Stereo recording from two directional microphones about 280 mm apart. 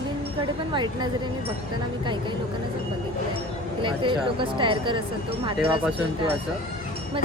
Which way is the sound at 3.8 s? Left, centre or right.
Centre.